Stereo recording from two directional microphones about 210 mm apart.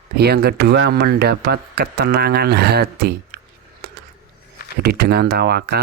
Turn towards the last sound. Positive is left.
turn(degrees=-50)  # may be behind; listen again after turning